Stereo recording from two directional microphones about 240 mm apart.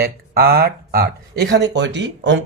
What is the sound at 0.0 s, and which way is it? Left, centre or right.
Speech, right.